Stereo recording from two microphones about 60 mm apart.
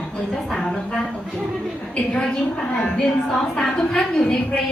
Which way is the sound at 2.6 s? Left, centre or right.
Centre.